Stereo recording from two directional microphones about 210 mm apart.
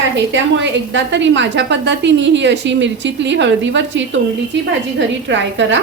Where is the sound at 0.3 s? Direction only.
60° right (ahead or behind).